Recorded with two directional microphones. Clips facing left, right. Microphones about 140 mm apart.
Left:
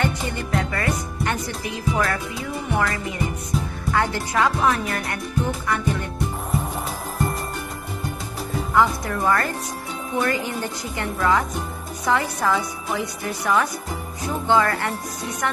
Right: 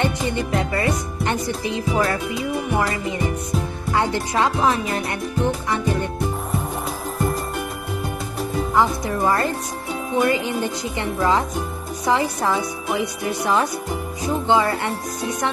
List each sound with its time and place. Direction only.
0.6 s speech: 20° right (ahead or behind)
8.7 s speech: 20° right (ahead or behind)